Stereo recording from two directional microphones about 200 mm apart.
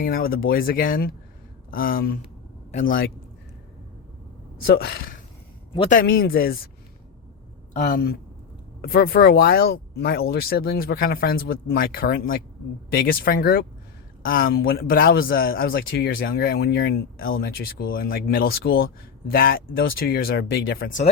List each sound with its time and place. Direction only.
0.0 s speech: 45° left (ahead or behind)
4.5 s speech: 50° left (ahead or behind)
7.7 s speech: 40° left (ahead or behind)